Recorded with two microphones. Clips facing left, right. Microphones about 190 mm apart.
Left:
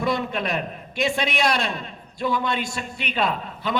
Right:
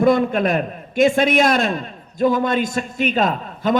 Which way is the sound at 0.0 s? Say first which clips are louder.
Right 9 dB; 50° right (ahead or behind).